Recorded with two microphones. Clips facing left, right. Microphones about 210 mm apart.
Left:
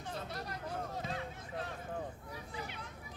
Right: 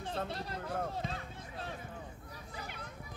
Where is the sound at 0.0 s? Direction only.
30° right (ahead or behind).